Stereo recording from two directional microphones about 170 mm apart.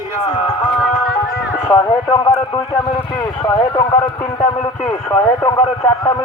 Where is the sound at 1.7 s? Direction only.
20° left (ahead or behind).